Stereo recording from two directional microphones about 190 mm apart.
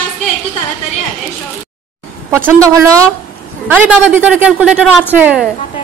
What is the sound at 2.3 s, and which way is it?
Speech, 15° right (ahead or behind).